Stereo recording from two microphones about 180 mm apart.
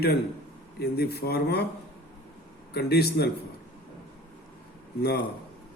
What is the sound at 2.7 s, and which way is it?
Speech, 65° left (ahead or behind).